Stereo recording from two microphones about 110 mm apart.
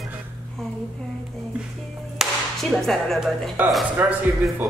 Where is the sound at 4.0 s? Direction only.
15° right (ahead or behind).